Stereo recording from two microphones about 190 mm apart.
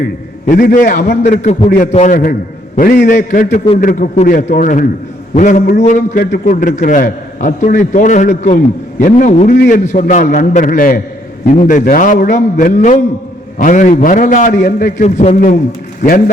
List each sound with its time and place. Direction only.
0.4 s a man's voice: 45° left (ahead or behind)
2.7 s a man's voice: 55° left (ahead or behind)